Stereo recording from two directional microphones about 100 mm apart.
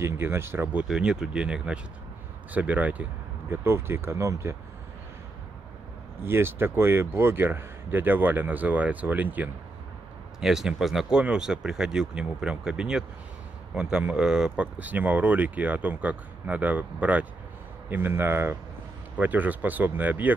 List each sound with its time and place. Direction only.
0.0 s speech: 25° right (ahead or behind)
0.8 s speech: 5° right (ahead or behind)
3.6 s speech: 25° right (ahead or behind)
6.2 s speech: 20° right (ahead or behind)
10.4 s speech: 5° right (ahead or behind)